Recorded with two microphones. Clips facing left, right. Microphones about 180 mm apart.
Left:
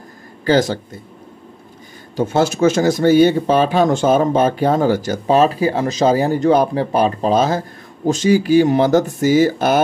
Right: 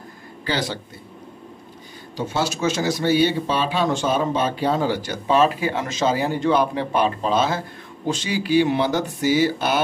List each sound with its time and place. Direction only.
0.5 s speech: 45° left (ahead or behind)
2.1 s speech: 50° left (ahead or behind)